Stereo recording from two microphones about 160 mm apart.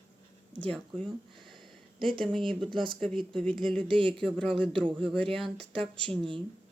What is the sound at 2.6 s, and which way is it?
Speech, 30° right (ahead or behind).